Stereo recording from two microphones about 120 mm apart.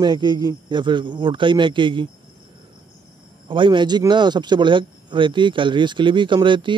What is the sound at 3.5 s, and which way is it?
A man's voice, 40° right (ahead or behind).